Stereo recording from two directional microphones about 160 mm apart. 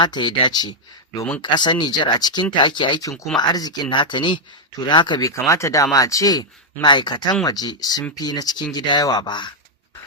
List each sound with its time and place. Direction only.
0.0 s speech: 30° left (ahead or behind)